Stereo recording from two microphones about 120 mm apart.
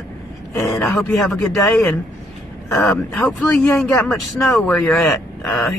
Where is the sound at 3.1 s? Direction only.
10° left (ahead or behind).